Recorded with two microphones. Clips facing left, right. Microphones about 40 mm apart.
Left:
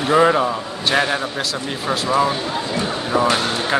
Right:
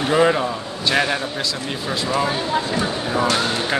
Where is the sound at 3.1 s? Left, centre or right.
Left.